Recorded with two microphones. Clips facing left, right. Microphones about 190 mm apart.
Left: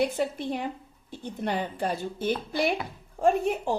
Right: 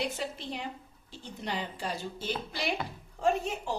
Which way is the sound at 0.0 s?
55° left (ahead or behind).